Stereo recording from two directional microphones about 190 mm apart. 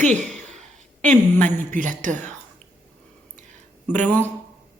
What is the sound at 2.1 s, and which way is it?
Speech, 10° left (ahead or behind).